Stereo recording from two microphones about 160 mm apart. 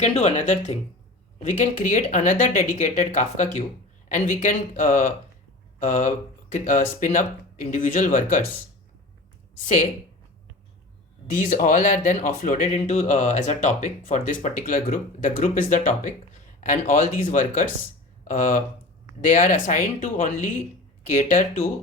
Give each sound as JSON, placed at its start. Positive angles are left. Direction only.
{"t": 0.0, "sound": "speech", "side_deg": 45}
{"t": 11.3, "sound": "speech", "side_deg": 50}